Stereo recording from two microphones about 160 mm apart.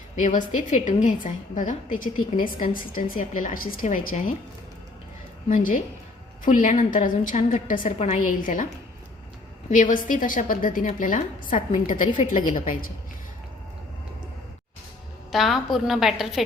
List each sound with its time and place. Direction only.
0.2 s a woman's voice: 50° left (ahead or behind)
5.5 s a woman's voice: 55° left (ahead or behind)
9.6 s a woman's voice: 55° left (ahead or behind)
15.3 s a woman's voice: centre (ahead or behind)